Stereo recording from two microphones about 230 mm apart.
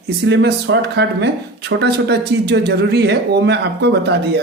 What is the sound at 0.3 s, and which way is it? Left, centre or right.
Speech, right.